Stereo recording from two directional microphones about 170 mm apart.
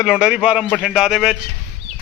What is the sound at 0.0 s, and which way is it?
A man's voice, 5° right (ahead or behind).